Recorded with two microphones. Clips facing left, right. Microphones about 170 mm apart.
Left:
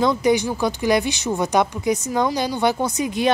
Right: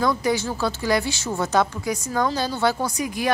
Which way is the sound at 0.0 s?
20° left (ahead or behind).